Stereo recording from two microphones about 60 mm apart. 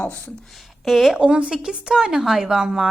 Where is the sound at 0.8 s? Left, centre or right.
Centre.